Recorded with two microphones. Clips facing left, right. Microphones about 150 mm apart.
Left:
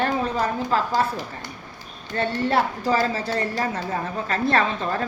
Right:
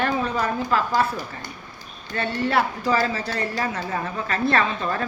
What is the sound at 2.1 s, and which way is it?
Speech, 40° left (ahead or behind).